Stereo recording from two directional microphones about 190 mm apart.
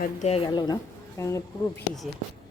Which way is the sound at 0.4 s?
20° left (ahead or behind).